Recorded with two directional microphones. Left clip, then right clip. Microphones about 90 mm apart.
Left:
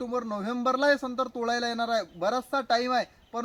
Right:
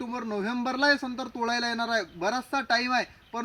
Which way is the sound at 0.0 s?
20° left (ahead or behind).